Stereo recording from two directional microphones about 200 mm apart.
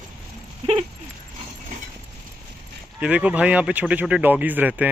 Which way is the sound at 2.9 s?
5° right (ahead or behind).